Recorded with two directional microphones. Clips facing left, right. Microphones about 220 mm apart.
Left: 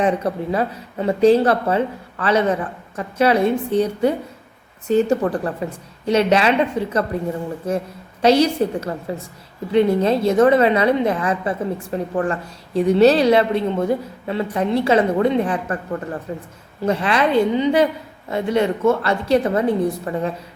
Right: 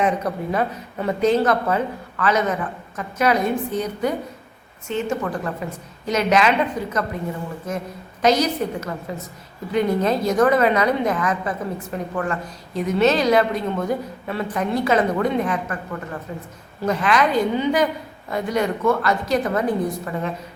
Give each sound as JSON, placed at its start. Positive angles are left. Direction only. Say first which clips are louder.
{"t": 0.0, "sound": "a woman's voice", "louder": "left 2 dB", "side_deg": 30}